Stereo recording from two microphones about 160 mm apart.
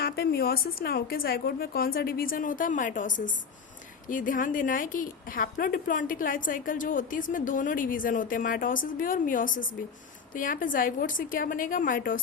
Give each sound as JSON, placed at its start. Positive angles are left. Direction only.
{"t": 0.0, "sound": "a woman's voice", "side_deg": 80}